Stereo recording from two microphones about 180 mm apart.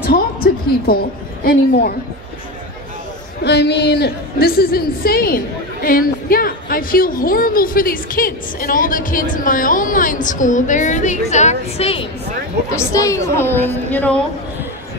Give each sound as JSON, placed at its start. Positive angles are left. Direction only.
{"t": 0.0, "sound": "a sound", "side_deg": 55}
{"t": 3.4, "sound": "a woman's voice", "side_deg": 70}
{"t": 12.9, "sound": "a woman's voice", "side_deg": 20}